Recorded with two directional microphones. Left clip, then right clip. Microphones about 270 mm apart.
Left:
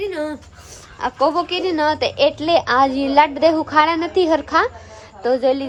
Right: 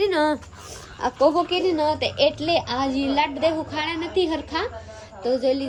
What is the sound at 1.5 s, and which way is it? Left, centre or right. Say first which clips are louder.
A woman's voice: left 3 dB; centre.